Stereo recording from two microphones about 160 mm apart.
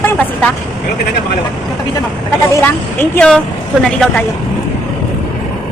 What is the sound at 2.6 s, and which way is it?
A man's voice, 10° left (ahead or behind).